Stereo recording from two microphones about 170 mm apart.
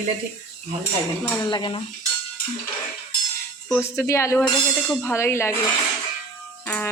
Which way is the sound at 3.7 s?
15° left (ahead or behind).